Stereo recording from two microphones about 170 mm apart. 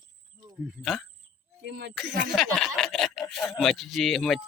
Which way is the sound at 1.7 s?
85° right.